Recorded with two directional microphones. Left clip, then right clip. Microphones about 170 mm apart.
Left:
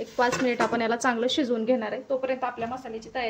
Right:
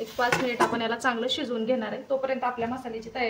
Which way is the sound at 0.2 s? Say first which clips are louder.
Even; 40° left (ahead or behind).